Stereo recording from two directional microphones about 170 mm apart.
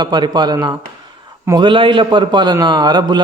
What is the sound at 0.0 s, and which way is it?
A man's voice, 25° right (ahead or behind).